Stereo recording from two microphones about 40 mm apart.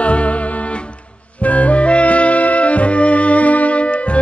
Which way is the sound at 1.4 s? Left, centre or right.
Left.